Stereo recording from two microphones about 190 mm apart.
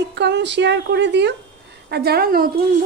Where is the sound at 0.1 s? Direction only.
65° right (ahead or behind).